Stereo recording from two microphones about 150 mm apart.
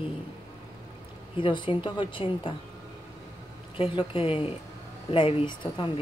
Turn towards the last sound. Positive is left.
turn(degrees=30)  # may be behind; listen again after turning